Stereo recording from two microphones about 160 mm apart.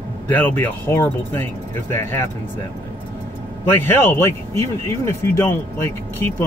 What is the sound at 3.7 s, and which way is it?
Speech, 15° left (ahead or behind).